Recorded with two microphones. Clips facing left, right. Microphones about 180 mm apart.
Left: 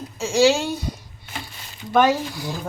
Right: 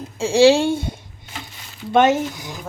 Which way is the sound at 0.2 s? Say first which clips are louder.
Right 4 dB; 30° right (ahead or behind).